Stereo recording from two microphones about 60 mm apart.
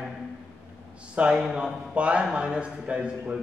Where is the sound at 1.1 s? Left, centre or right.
Right.